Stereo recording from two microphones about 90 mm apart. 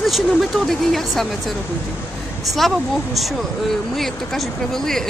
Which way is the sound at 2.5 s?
Centre (ahead or behind).